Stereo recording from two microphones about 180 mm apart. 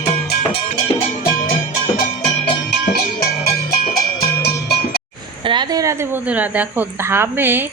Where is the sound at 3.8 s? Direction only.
55° left (ahead or behind).